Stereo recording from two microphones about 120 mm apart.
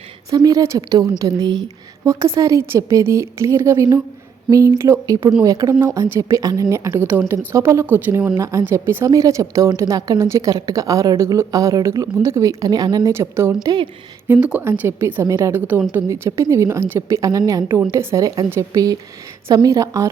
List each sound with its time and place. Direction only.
0.3 s a woman's voice: 30° right (ahead or behind)
2.0 s a woman's voice: 25° right (ahead or behind)
13.1 s a woman's voice: 20° right (ahead or behind)
13.6 s a woman's voice: 35° right (ahead or behind)
14.3 s a woman's voice: 15° right (ahead or behind); by 20.1 s 30° right (ahead or behind)